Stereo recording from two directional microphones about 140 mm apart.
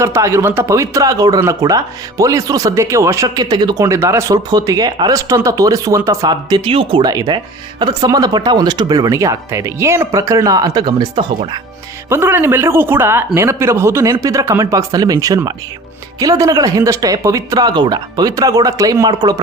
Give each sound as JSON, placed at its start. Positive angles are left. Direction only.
{"t": 0.0, "sound": "speech", "side_deg": -20}
{"t": 12.0, "sound": "speech", "side_deg": -15}